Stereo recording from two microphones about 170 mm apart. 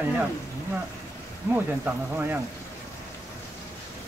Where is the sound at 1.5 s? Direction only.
15° right (ahead or behind).